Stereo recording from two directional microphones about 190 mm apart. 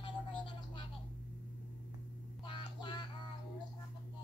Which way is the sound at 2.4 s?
25° left (ahead or behind).